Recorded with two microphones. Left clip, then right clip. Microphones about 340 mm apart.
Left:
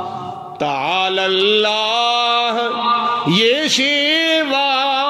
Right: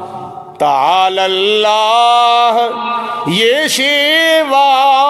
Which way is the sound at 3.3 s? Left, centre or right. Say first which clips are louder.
Right 5 dB; centre.